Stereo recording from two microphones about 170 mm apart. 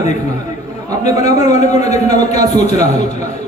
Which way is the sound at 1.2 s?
40° left (ahead or behind).